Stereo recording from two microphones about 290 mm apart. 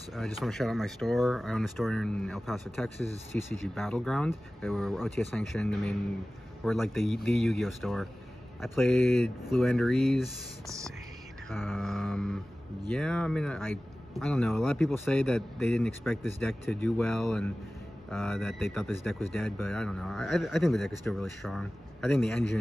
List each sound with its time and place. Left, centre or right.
0.1 s speech: centre
11.5 s speech: centre